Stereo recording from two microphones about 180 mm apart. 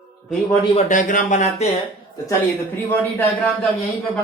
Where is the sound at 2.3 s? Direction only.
10° left (ahead or behind).